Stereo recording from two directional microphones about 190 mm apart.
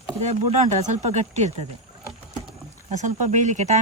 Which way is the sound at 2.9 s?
40° right (ahead or behind).